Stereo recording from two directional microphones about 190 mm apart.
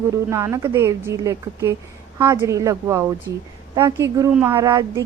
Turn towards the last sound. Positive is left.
turn(degrees=-20)  # may be behind; listen again after turning